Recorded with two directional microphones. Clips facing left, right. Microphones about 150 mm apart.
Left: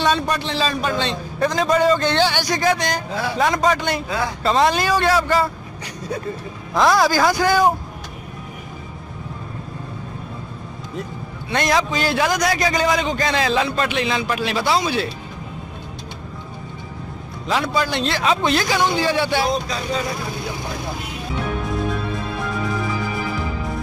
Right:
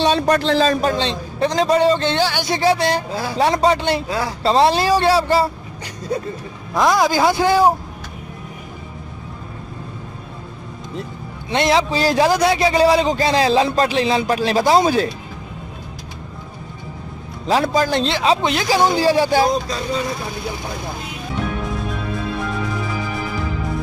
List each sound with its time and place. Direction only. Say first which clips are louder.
0.3 s speech: right 7 dB; 45° right (ahead or behind)
0.9 s a man's voice: right 1 dB; 25° right (ahead or behind)
2.1 s speech: left 1 dB; 5° right (ahead or behind)
2.4 s a man's voice: right 3 dB; 30° right (ahead or behind)
6.8 s a man's voice: even; 15° right (ahead or behind)
11.5 s a man's voice: right 3 dB; 25° right (ahead or behind); by 15.0 s 40° right (ahead or behind)
17.5 s a man's voice: right 4 dB; 40° right (ahead or behind)
18.0 s a man's voice: right 3 dB; 30° right (ahead or behind)
18.4 s speech: left 1 dB; 15° right (ahead or behind)
18.7 s a man's voice: right 4 dB; 40° right (ahead or behind)